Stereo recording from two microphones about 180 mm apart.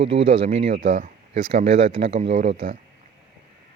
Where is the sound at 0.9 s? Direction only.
45° right (ahead or behind).